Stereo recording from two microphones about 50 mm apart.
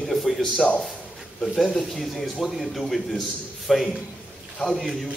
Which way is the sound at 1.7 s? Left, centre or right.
Centre.